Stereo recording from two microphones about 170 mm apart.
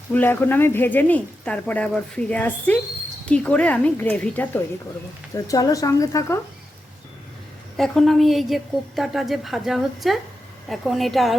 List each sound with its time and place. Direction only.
0.1 s speech: 10° left (ahead or behind)
5.3 s speech: 20° left (ahead or behind)
7.8 s a woman's voice: centre (ahead or behind)